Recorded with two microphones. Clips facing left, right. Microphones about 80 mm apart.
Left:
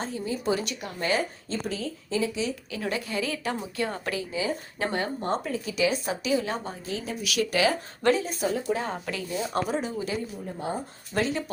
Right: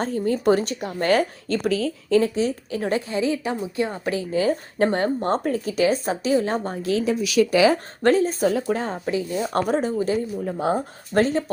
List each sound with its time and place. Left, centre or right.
0.0 s speech: right
0.6 s speech: right
1.0 s speech: right
2.3 s a woman's voice: right; by 4.1 s centre
4.3 s speech: right
6.8 s speech: right
8.0 s speech: right
8.7 s speech: right
9.0 s a woman's voice: right
9.5 s speech: right
10.4 s speech: right
11.1 s speech: right